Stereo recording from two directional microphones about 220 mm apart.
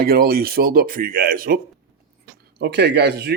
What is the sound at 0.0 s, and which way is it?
Speech, 45° right (ahead or behind).